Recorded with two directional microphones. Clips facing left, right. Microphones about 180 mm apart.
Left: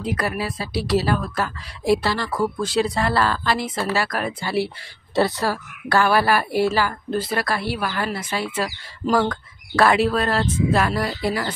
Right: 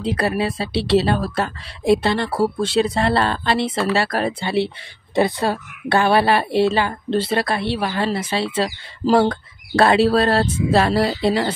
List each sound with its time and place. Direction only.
0.0 s a woman's voice: 30° right (ahead or behind)